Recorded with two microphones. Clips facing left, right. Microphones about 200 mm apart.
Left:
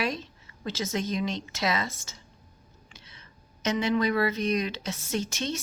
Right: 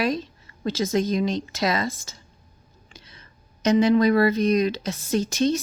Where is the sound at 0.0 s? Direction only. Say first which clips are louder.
Right 6 dB; 35° right (ahead or behind).